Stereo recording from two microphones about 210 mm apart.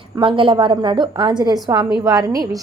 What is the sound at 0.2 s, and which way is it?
A woman's voice, 25° right (ahead or behind).